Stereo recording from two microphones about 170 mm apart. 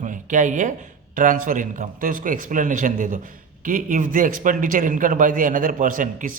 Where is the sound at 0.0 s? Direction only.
50° right (ahead or behind).